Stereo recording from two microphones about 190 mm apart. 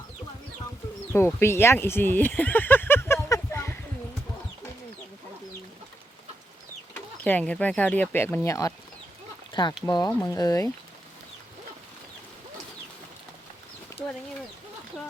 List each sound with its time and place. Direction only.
1.1 s a sound: 15° left (ahead or behind)
6.9 s speech: 10° left (ahead or behind)
10.1 s speech: 10° left (ahead or behind)